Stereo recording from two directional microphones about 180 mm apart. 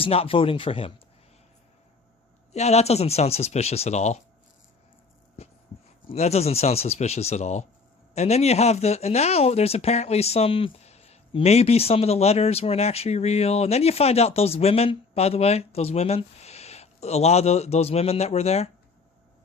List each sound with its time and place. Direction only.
0.0 s speech: 30° left (ahead or behind)
2.5 s speech: 35° left (ahead or behind)
5.4 s a sound: 35° left (ahead or behind)
6.1 s speech: 35° left (ahead or behind)